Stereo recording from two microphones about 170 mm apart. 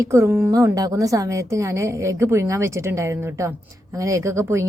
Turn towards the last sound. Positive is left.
turn(degrees=-15)  # may be behind; listen again after turning